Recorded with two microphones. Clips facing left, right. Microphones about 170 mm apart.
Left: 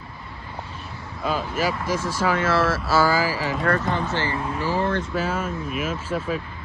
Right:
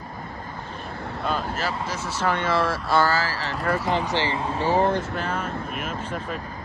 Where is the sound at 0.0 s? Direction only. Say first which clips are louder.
Right 4 dB; 45° right (ahead or behind).